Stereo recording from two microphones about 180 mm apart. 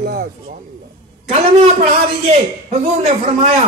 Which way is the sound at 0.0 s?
60° right (ahead or behind).